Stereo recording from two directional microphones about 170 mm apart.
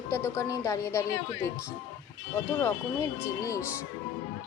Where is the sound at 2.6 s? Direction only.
15° left (ahead or behind).